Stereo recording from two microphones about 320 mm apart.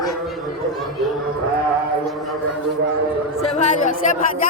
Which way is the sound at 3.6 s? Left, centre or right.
Left.